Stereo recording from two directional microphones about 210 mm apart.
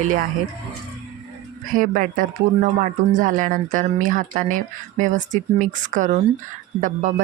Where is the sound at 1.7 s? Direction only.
40° right (ahead or behind).